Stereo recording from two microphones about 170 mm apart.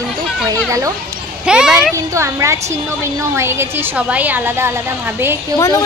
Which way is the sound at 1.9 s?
15° right (ahead or behind).